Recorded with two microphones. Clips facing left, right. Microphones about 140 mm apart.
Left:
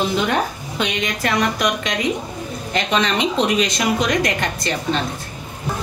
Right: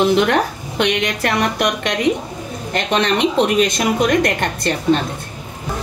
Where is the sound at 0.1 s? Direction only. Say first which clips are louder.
Right 5 dB; 70° right (ahead or behind).